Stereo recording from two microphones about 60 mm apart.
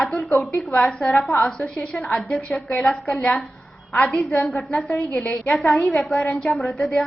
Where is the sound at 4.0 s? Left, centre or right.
Left.